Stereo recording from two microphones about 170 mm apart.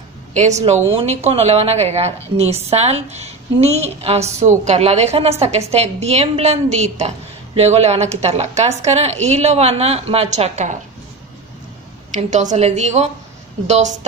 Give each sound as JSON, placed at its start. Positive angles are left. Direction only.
{"t": 0.3, "sound": "a woman's voice", "side_deg": -40}
{"t": 12.1, "sound": "a woman's voice", "side_deg": -45}